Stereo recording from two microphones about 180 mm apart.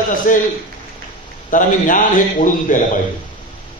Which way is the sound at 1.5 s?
45° left (ahead or behind).